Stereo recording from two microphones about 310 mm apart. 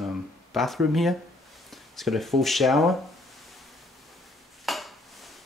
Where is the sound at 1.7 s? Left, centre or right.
Centre.